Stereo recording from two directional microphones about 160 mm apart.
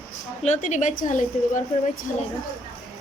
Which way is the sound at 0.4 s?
45° left (ahead or behind).